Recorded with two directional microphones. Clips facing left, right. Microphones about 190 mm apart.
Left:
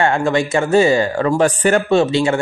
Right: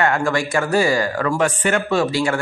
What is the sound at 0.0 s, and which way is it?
Speech, 25° left (ahead or behind).